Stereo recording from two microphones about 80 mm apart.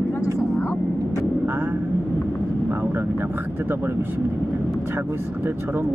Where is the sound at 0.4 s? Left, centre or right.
Left.